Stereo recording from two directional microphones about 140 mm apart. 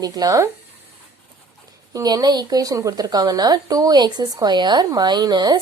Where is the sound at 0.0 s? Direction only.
25° right (ahead or behind).